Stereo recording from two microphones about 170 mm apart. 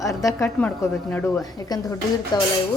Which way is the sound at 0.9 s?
5° left (ahead or behind).